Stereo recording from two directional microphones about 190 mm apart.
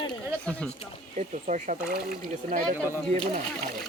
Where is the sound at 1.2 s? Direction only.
40° right (ahead or behind).